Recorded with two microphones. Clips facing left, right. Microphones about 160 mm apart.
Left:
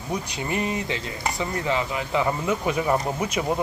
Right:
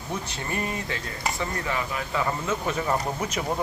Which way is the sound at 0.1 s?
15° left (ahead or behind).